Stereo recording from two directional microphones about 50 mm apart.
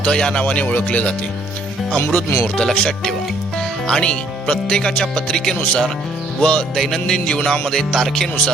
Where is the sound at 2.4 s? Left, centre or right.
Centre.